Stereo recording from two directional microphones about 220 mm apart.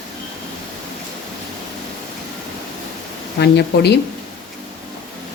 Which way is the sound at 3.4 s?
50° left (ahead or behind).